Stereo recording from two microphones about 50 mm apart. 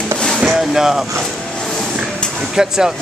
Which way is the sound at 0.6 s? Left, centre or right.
Centre.